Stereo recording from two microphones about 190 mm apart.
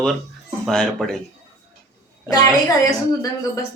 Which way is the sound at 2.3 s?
20° left (ahead or behind).